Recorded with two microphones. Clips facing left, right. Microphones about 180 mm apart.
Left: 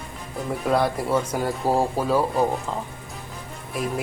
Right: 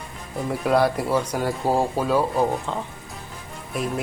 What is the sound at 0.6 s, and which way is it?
A man's voice, centre (ahead or behind).